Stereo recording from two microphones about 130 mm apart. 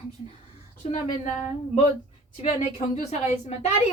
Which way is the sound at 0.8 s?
65° left (ahead or behind).